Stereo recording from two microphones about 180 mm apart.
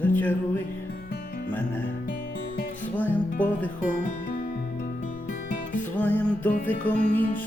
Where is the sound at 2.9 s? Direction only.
10° left (ahead or behind).